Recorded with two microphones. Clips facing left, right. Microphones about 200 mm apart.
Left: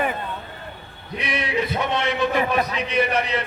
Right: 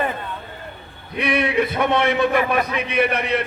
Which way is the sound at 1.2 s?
60° right (ahead or behind).